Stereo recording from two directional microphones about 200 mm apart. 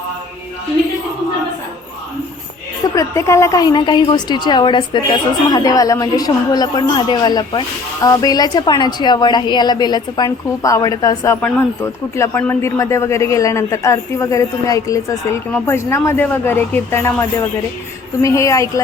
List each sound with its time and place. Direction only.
2.9 s a woman's voice: 15° left (ahead or behind)